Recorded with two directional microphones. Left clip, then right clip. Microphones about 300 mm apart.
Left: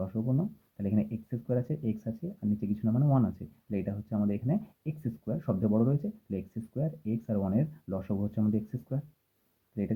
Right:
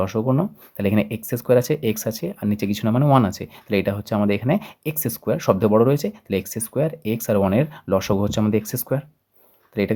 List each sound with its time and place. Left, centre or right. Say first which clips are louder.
0.0 s speech: right 13 dB; right